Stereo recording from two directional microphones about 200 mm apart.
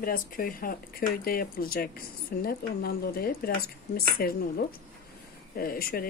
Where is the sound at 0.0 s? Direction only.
45° left (ahead or behind).